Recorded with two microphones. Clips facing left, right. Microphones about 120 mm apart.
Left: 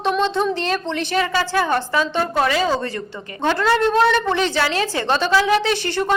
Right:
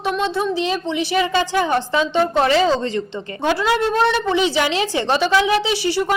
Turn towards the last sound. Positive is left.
turn(degrees=-10)  # may be behind; listen again after turning